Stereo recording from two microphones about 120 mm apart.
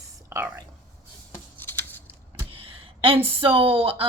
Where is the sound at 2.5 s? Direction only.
50° right (ahead or behind).